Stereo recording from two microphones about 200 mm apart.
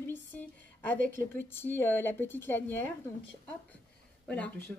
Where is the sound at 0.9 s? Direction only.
45° right (ahead or behind).